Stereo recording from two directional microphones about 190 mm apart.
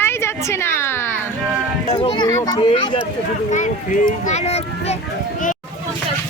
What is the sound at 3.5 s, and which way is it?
A child's voice, 40° left (ahead or behind).